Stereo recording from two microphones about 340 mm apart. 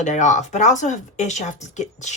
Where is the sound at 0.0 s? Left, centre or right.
Left.